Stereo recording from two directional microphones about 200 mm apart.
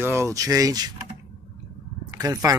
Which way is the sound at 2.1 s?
20° right (ahead or behind).